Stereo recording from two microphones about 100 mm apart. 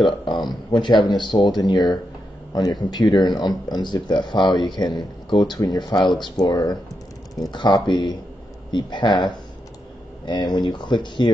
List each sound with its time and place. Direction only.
0.2 s speech: 50° left (ahead or behind)